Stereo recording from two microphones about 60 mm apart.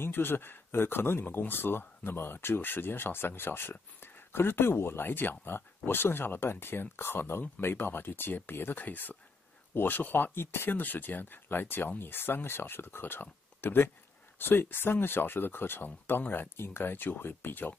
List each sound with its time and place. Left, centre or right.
0.0 s speech: left